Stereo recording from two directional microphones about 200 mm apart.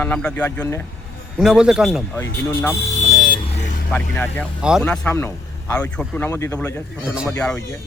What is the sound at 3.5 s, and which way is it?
Vehicle, 35° left (ahead or behind).